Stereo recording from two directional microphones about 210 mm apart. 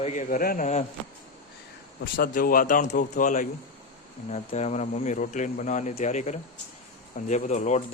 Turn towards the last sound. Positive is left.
turn(degrees=35)  # may be behind; listen again after turning